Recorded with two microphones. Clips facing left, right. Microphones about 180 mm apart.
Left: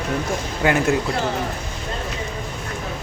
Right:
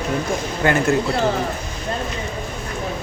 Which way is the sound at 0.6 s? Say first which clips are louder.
Even; 10° left (ahead or behind).